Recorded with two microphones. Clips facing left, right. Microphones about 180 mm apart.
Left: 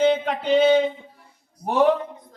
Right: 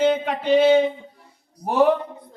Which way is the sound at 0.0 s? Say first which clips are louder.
Even; 5° right (ahead or behind).